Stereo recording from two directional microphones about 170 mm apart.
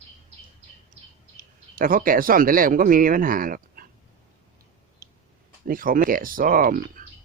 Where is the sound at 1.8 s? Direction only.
55° right (ahead or behind).